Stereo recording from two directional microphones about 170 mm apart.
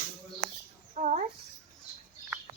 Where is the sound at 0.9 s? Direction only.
45° right (ahead or behind).